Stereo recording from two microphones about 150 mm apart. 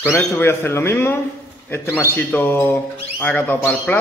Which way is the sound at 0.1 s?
15° left (ahead or behind).